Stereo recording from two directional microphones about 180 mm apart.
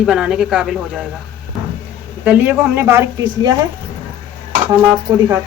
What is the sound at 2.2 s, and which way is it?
Speech, 10° right (ahead or behind).